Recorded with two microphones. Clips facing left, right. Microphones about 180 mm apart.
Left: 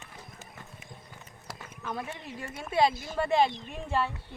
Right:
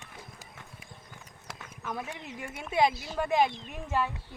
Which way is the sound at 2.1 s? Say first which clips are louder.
Even; 15° right (ahead or behind).